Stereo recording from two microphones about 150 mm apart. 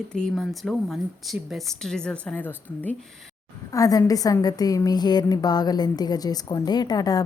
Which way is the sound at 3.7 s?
25° left (ahead or behind).